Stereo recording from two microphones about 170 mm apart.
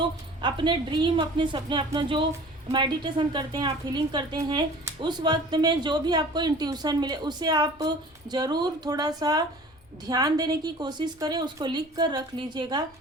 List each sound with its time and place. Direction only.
0.0 s a woman's voice: 30° right (ahead or behind)